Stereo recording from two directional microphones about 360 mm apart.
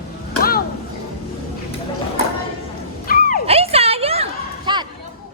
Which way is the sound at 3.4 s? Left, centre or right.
Centre.